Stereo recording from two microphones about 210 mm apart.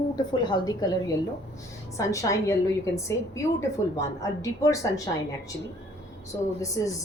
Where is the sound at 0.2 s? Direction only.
20° left (ahead or behind).